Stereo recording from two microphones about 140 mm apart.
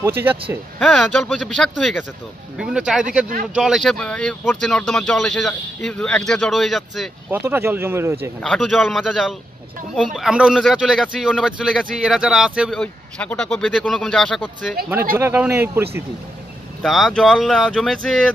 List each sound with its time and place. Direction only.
0.0 s speech: 15° right (ahead or behind)
0.7 s speech: 5° left (ahead or behind)
7.2 s speech: 15° right (ahead or behind)
8.4 s speech: 5° left (ahead or behind)
12.7 s speech: 10° left (ahead or behind)
15.1 s speech: 15° right (ahead or behind)
16.8 s speech: centre (ahead or behind)